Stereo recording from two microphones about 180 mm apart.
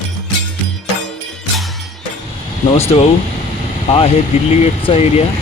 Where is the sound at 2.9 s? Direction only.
35° left (ahead or behind).